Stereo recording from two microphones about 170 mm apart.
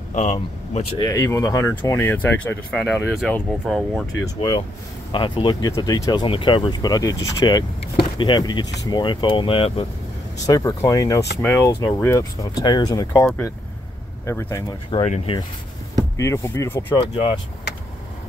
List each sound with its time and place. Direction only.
0.1 s speech: 40° left (ahead or behind)
0.9 s speech: 20° left (ahead or behind); by 4.0 s centre (ahead or behind)
4.2 s speech: 25° left (ahead or behind)
10.4 s speech: 20° left (ahead or behind)
14.7 s speech: 30° left (ahead or behind)
15.0 s speech: 40° left (ahead or behind)
16.2 s speech: 15° left (ahead or behind)